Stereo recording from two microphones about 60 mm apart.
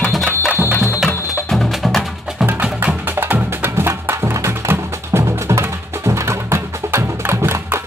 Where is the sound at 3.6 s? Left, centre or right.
Right.